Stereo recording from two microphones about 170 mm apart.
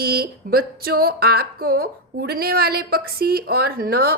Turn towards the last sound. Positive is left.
turn(degrees=-65)  # may be behind; listen again after turning